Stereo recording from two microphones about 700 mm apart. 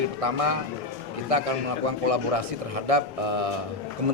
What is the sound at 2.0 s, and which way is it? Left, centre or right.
Speech, right.